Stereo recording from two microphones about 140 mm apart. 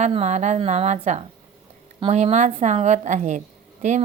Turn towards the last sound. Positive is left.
turn(degrees=-60)  # may be behind; listen again after turning